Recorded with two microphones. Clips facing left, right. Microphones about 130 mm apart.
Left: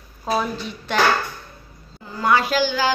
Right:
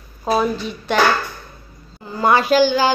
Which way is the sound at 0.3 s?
10° right (ahead or behind).